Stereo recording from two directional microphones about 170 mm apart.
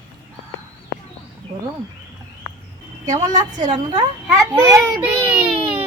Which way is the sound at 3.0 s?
20° right (ahead or behind).